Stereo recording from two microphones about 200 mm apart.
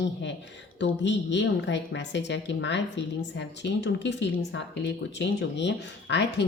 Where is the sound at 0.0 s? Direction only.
65° left (ahead or behind).